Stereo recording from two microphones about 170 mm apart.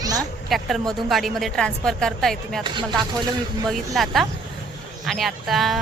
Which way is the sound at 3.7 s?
Centre (ahead or behind).